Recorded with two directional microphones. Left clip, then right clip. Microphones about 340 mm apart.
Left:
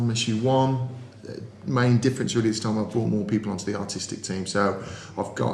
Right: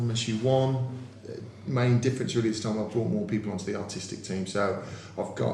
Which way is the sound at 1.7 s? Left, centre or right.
Left.